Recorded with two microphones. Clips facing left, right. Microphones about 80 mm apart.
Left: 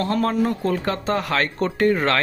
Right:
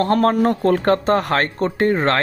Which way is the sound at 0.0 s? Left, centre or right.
Right.